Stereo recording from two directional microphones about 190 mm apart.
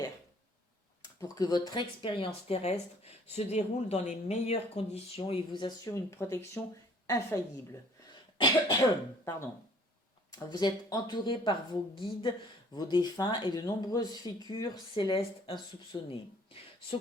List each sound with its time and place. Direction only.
1.0 s speech: 20° left (ahead or behind)
10.3 s speech: 20° left (ahead or behind)